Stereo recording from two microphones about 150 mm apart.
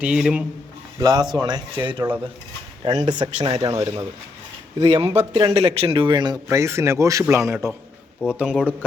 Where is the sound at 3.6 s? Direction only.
20° right (ahead or behind).